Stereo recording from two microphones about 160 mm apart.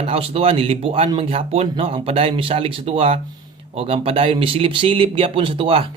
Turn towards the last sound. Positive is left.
turn(degrees=-35)  # may be behind; listen again after turning